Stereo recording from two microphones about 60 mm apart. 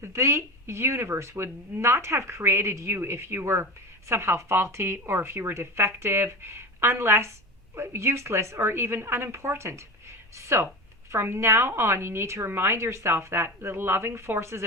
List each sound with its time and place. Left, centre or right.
0.0 s speech: right